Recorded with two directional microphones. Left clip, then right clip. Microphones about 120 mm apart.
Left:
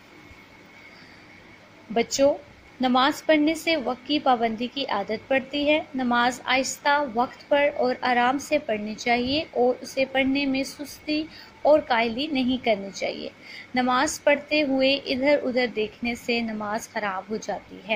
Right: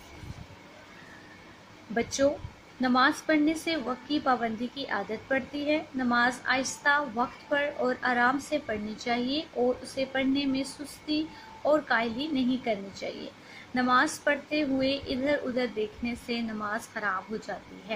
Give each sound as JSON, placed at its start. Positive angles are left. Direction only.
{"t": 2.0, "sound": "a woman's voice", "side_deg": 30}